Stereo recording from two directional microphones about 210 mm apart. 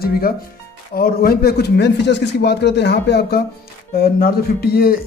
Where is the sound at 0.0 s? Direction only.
45° left (ahead or behind).